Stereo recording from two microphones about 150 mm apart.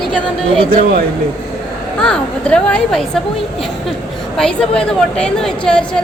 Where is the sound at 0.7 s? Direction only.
75° right (ahead or behind).